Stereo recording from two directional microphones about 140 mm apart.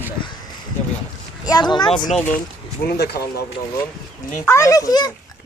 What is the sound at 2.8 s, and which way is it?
Speech, 90° left.